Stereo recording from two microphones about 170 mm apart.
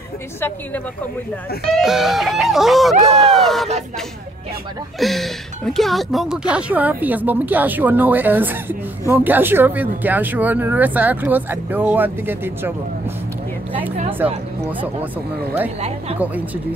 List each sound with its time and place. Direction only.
1.7 s speech: centre (ahead or behind)
5.0 s speech: centre (ahead or behind)
14.2 s speech: 10° right (ahead or behind)